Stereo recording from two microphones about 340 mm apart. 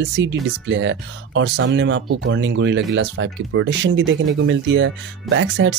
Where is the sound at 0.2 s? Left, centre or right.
Right.